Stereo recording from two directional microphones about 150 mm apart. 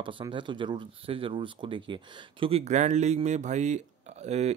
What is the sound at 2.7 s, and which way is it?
Speech, 50° right (ahead or behind).